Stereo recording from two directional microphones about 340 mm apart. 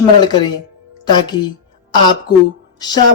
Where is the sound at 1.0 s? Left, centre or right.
Centre.